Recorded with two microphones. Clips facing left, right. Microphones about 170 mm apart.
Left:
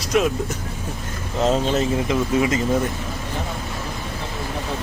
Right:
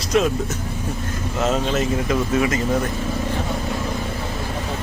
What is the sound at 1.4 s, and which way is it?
Speech, 30° left (ahead or behind).